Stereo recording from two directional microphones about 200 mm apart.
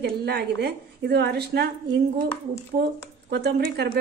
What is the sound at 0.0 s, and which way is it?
A woman's voice, 55° right (ahead or behind).